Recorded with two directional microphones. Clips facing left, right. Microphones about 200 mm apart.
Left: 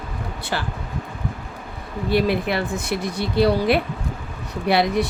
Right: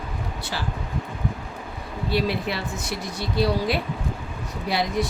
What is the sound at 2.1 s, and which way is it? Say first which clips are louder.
Speech: left 5 dB; 55° left (ahead or behind).